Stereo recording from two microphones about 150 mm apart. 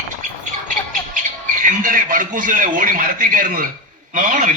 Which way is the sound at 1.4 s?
60° right (ahead or behind).